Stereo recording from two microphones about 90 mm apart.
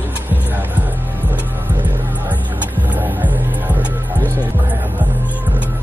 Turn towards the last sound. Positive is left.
turn(degrees=20)  # may be behind; listen again after turning